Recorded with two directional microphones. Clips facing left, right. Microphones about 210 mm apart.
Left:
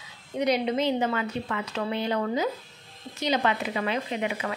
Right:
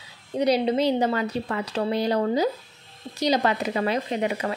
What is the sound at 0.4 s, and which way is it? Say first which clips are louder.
Speech: right 3 dB; 35° right (ahead or behind).